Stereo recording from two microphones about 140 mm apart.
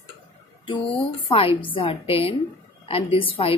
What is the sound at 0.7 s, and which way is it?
A woman's voice, 40° left (ahead or behind).